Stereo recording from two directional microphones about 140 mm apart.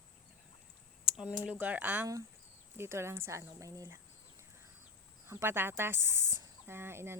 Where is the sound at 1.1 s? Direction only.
5° right (ahead or behind).